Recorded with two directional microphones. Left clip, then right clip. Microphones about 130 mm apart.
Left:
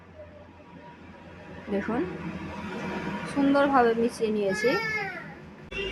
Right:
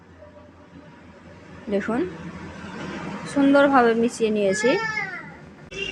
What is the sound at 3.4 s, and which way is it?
A child's voice, 30° right (ahead or behind).